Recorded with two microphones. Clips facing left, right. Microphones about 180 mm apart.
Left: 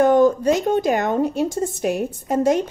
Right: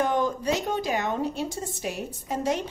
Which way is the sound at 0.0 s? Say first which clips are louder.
Left 10 dB; 45° left (ahead or behind).